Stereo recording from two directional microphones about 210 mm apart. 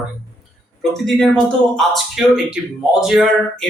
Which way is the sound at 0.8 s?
Centre (ahead or behind).